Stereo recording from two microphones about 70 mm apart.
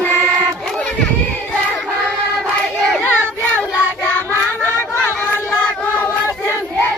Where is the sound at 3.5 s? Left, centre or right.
Left.